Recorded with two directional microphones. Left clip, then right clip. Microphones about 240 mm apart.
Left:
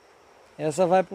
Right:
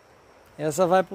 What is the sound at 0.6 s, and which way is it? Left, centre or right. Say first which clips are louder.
Speech: even; centre.